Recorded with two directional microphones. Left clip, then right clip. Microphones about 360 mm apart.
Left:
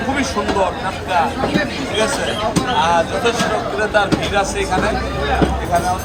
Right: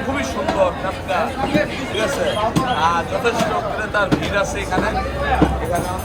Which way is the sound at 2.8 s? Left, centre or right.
Centre.